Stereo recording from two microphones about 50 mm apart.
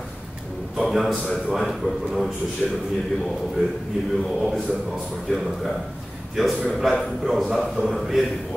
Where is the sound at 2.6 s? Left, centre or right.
Left.